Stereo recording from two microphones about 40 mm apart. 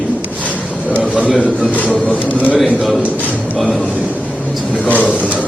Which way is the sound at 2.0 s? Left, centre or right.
Left.